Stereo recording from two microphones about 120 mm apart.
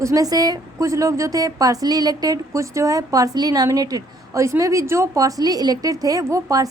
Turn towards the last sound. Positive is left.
turn(degrees=-30)  # may be behind; listen again after turning